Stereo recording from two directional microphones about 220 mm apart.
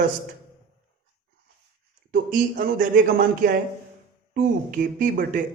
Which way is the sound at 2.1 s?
40° right (ahead or behind).